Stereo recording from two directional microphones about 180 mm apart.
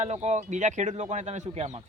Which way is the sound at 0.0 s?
40° right (ahead or behind).